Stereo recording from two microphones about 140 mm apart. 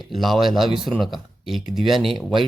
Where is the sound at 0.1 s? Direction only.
Centre (ahead or behind).